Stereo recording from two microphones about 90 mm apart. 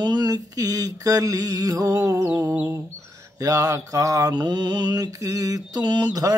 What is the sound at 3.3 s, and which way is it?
Mantra, 40° right (ahead or behind).